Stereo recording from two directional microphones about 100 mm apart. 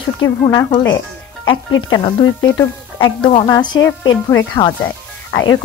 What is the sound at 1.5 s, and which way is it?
A woman's voice, 50° left (ahead or behind).